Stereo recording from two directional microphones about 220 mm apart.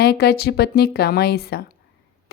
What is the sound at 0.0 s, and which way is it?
A woman's voice, 45° left (ahead or behind).